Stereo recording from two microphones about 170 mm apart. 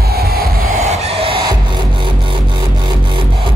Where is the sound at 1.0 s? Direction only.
35° right (ahead or behind).